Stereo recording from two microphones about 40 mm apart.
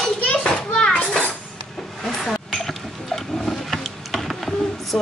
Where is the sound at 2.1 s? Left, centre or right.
Centre.